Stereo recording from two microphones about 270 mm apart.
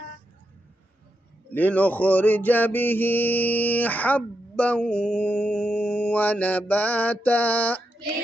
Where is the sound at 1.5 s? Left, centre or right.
Centre.